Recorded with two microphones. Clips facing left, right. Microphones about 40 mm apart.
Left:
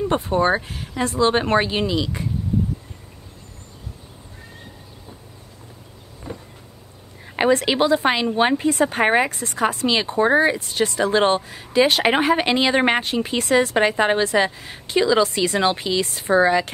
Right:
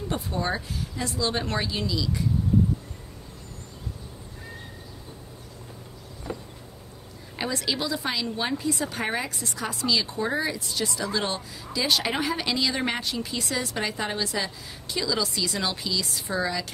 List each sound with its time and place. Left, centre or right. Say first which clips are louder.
0.1 s speech: left 8 dB; left
7.3 s a woman's voice: left 11 dB; left